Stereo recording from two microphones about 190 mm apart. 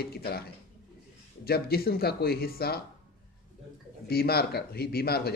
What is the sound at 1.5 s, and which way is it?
Speech, 55° left (ahead or behind).